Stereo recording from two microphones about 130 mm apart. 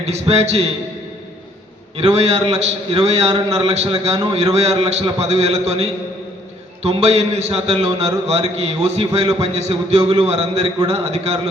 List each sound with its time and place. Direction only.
0.0 s a man's voice: 55° right (ahead or behind)
2.0 s a man's voice: 50° right (ahead or behind)